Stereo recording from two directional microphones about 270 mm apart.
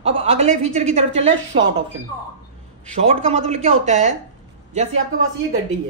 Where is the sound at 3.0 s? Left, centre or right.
Right.